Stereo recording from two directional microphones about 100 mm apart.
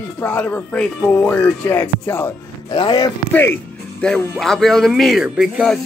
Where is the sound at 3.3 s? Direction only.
25° left (ahead or behind).